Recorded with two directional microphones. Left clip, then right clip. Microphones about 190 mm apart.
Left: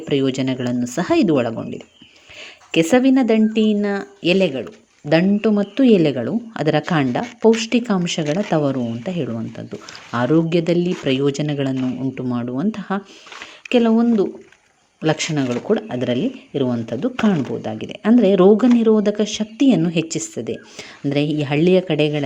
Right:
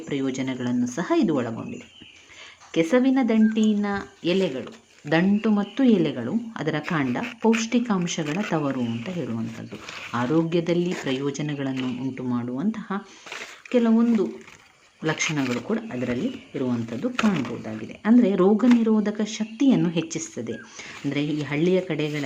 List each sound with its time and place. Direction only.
0.1 s speech: 25° left (ahead or behind)
2.7 s speech: 25° left (ahead or behind)
10.1 s speech: 20° left (ahead or behind)